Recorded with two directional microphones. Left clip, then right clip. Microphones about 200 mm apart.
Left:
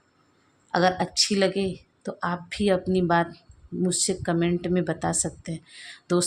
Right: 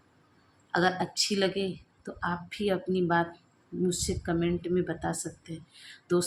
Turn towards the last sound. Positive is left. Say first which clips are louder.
# left 3 dB
turn(degrees=35)  # may be behind; listen again after turning